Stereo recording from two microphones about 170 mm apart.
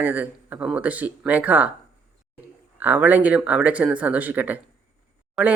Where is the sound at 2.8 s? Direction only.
10° right (ahead or behind).